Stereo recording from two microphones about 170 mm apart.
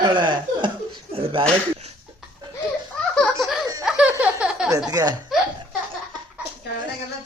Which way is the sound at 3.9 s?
5° right (ahead or behind).